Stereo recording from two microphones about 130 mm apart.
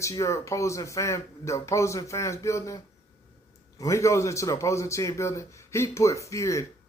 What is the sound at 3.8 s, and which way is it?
Speech, 25° left (ahead or behind).